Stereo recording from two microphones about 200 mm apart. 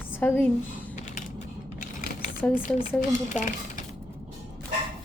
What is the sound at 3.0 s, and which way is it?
Speech, 40° left (ahead or behind).